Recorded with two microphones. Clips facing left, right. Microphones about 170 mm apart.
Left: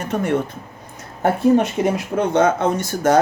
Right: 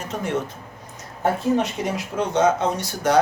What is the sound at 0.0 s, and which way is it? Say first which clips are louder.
Speech: left 5 dB; 60° left (ahead or behind).